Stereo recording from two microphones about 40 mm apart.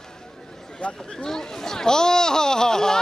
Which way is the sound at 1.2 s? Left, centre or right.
Centre.